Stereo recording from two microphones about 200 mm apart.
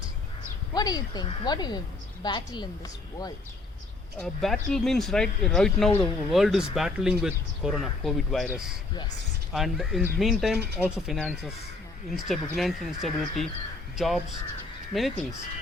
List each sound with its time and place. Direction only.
0.7 s speech: 20° left (ahead or behind)
4.2 s speech: 5° left (ahead or behind)